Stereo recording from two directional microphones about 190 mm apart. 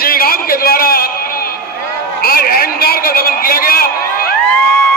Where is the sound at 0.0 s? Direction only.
50° left (ahead or behind).